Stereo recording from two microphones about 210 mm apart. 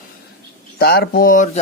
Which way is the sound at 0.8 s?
50° left (ahead or behind).